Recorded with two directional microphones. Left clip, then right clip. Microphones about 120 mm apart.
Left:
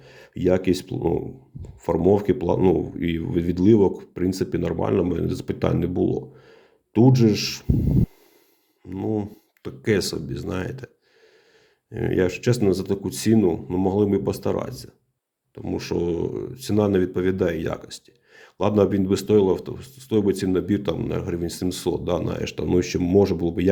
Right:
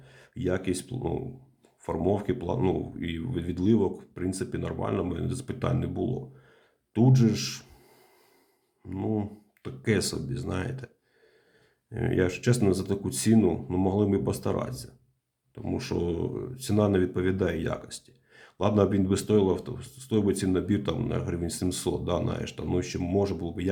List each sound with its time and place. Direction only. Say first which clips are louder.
0.0 s speech: left 9 dB; 30° left (ahead or behind)
8.9 s speech: left 5 dB; 25° left (ahead or behind)
9.6 s speech: left 5 dB; 35° left (ahead or behind)
11.9 s speech: left 5 dB; 35° left (ahead or behind)
13.8 s speech: left 6 dB; 30° left (ahead or behind)